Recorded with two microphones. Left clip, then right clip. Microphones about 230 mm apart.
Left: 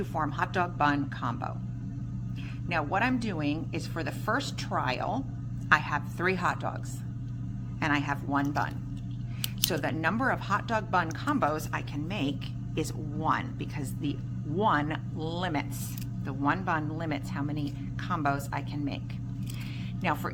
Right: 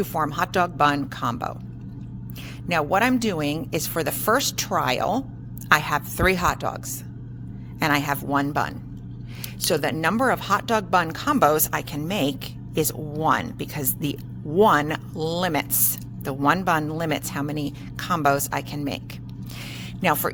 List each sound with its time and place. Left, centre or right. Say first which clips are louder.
0.0 s speech: right 7 dB; right
2.6 s speech: right 8 dB; right
7.8 s speech: right 7 dB; right